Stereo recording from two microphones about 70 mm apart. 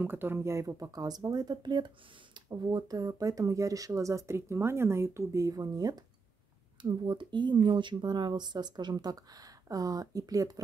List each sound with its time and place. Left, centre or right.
0.0 s speech: right
6.8 s speech: right